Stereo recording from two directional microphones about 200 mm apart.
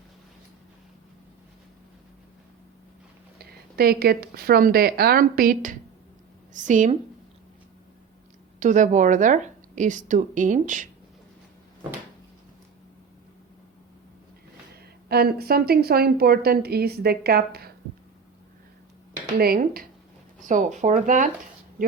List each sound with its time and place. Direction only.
3.3 s a woman's voice: 50° right (ahead or behind)
8.5 s a woman's voice: 40° right (ahead or behind)
15.1 s a woman's voice: 50° right (ahead or behind)
19.4 s a woman's voice: 50° right (ahead or behind)